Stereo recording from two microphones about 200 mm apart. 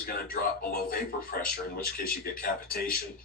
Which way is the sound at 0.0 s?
50° left (ahead or behind).